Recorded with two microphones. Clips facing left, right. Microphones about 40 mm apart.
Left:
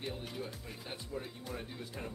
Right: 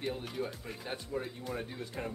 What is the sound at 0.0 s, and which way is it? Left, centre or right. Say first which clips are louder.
Music: right 5 dB; centre.